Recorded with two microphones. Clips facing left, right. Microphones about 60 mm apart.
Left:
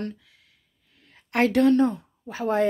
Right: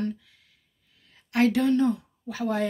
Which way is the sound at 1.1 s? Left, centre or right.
Left.